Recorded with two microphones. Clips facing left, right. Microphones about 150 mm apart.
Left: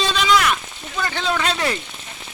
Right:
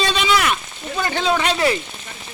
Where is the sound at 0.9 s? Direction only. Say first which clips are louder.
Right 3 dB; 45° right (ahead or behind).